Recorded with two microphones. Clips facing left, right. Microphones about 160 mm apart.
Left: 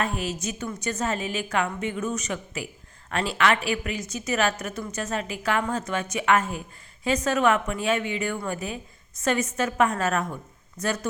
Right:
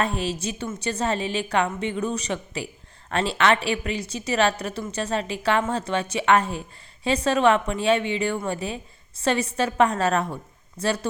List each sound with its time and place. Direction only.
0.2 s a woman's voice: 30° right (ahead or behind)